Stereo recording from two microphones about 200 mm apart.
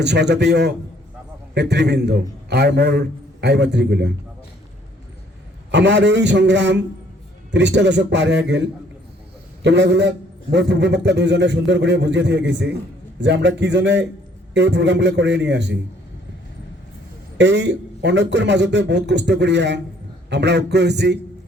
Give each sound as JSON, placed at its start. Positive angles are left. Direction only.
{"t": 0.0, "sound": "a man's voice", "side_deg": -55}
{"t": 5.7, "sound": "a man's voice", "side_deg": -60}
{"t": 9.6, "sound": "a man's voice", "side_deg": -60}
{"t": 17.3, "sound": "a man's voice", "side_deg": -60}